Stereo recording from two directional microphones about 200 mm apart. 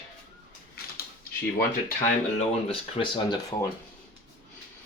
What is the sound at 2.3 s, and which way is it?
Speech, 25° left (ahead or behind).